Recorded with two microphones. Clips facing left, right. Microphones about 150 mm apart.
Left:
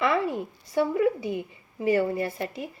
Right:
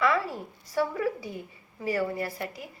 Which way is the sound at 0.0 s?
25° left (ahead or behind).